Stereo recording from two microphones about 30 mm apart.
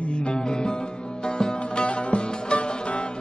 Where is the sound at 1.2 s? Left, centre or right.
Left.